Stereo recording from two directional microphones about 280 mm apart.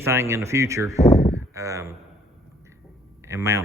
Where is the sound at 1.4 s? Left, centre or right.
Centre.